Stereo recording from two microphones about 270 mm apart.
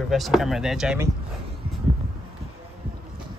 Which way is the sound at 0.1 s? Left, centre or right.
Centre.